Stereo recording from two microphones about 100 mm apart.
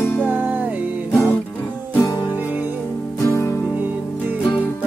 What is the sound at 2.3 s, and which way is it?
Music, 20° right (ahead or behind).